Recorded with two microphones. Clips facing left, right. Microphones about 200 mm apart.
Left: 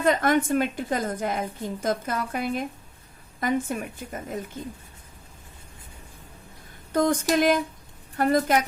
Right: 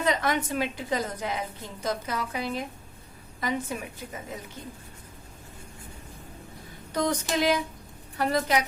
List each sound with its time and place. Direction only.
0.0 s a woman's voice: 50° left (ahead or behind)
6.9 s a woman's voice: 50° left (ahead or behind)